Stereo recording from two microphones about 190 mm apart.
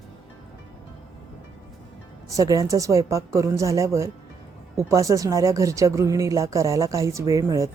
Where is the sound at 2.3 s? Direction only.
15° right (ahead or behind).